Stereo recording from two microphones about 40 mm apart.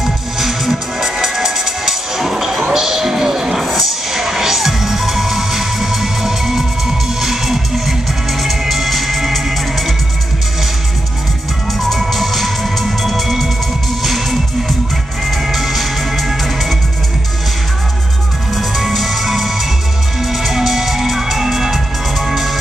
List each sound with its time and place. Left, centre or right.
0.0 s music: centre
11.9 s music: centre
15.5 s music: centre
18.5 s music: centre